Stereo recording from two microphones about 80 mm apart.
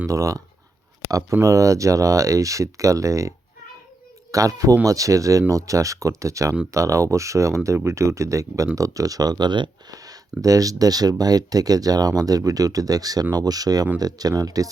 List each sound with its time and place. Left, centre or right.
0.1 s speech: right
9.9 s speech: right